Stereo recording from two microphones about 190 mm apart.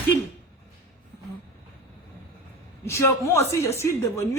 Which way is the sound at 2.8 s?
15° left (ahead or behind).